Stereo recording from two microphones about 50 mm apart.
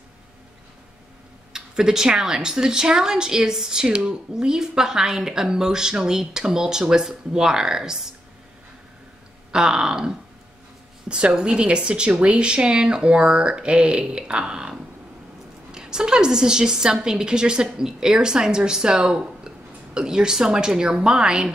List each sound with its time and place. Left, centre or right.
1.5 s speech: centre
9.5 s speech: centre
15.7 s speech: centre